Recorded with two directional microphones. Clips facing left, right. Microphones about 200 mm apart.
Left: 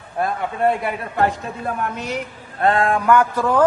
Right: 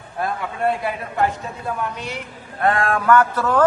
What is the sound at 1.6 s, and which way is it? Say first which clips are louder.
Speech: left 2 dB; 50° left (ahead or behind).